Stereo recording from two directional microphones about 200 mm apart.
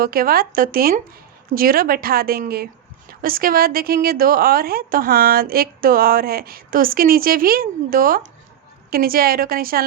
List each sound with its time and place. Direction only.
0.0 s a woman's voice: 45° right (ahead or behind)